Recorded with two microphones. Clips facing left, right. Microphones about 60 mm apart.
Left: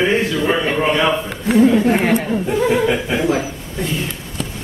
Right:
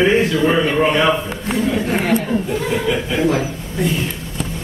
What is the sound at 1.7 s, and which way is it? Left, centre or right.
Speech, centre.